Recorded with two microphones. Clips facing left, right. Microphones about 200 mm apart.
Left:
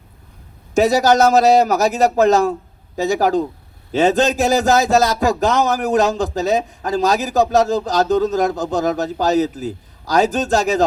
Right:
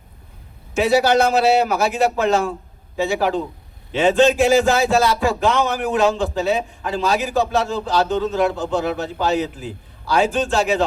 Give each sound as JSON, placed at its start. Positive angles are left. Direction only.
{"t": 0.7, "sound": "a man's voice", "side_deg": 40}